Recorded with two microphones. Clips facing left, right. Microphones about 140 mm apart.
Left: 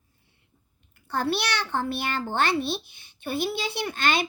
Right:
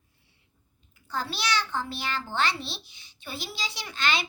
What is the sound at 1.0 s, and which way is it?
A child's voice, 60° left (ahead or behind).